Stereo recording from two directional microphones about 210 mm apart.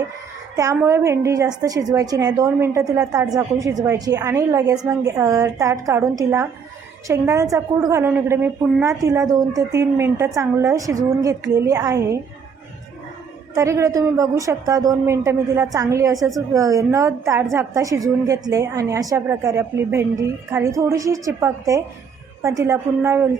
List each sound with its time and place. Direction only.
0.5 s a woman's voice: 15° right (ahead or behind)
13.5 s a woman's voice: 15° right (ahead or behind)